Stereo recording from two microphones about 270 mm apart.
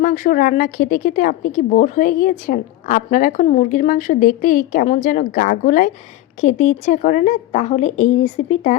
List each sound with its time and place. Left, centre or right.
0.0 s a woman's voice: left